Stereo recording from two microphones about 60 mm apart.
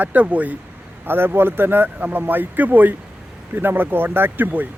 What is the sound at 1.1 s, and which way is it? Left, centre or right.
Speech, right.